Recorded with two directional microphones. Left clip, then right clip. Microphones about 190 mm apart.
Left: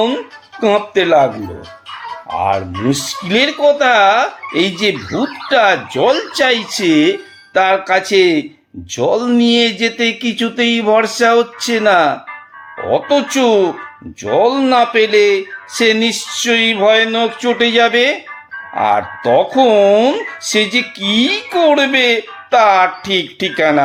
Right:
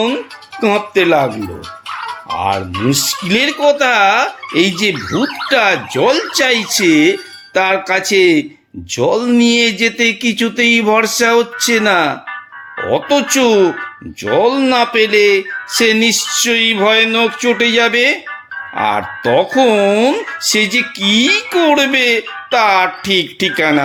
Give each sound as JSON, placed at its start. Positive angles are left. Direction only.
{"t": 0.6, "sound": "speech", "side_deg": -20}
{"t": 2.4, "sound": "speech", "side_deg": -20}